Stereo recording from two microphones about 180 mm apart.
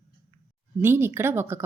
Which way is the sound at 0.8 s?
10° right (ahead or behind).